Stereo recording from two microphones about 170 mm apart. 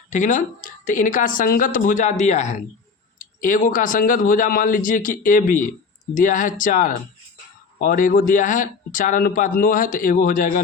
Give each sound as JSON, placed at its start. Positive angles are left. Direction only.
{"t": 0.1, "sound": "speech", "side_deg": 45}